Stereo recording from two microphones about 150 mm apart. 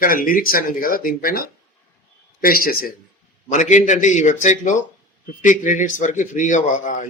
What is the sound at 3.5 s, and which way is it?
A man's voice, 55° left (ahead or behind).